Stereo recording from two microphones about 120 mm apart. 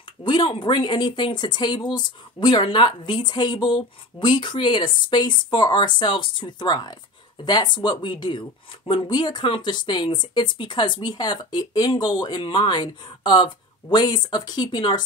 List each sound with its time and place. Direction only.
0.2 s speech: 40° left (ahead or behind)